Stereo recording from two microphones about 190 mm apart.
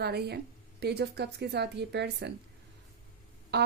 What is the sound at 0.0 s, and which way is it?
A woman's voice, 60° right (ahead or behind).